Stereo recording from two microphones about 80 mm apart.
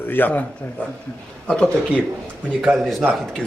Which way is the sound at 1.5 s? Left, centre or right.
Centre.